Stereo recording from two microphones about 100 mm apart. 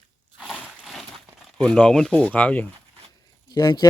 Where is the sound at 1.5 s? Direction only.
10° left (ahead or behind).